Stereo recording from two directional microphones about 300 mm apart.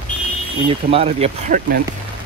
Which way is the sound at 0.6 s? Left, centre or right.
Centre.